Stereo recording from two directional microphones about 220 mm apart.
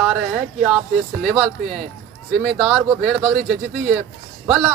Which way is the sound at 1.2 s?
Centre (ahead or behind).